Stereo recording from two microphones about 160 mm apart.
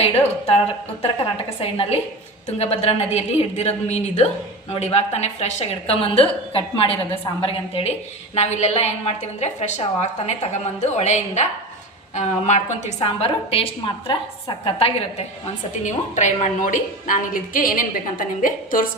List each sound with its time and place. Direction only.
1.5 s a woman's voice: 40° left (ahead or behind)
15.8 s a woman's voice: 50° left (ahead or behind)